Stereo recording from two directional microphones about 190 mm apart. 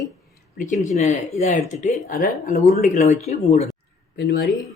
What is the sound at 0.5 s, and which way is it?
Speech, 40° left (ahead or behind).